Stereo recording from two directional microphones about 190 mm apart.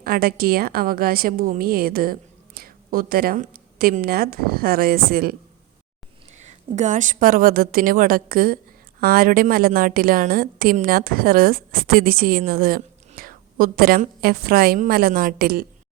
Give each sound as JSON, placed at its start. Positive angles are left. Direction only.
{"t": 0.0, "sound": "a woman's voice", "side_deg": -50}
{"t": 6.3, "sound": "a woman's voice", "side_deg": -40}